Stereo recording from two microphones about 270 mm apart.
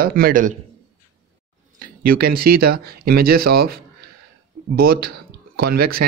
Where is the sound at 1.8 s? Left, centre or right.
Right.